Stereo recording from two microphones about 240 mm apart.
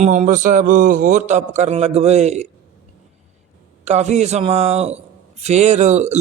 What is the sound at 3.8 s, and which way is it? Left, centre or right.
A man's voice, right.